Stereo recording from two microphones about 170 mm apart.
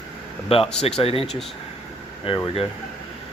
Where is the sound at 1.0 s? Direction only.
35° left (ahead or behind).